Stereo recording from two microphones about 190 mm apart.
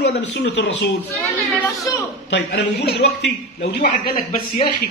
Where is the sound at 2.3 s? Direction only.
65° left (ahead or behind).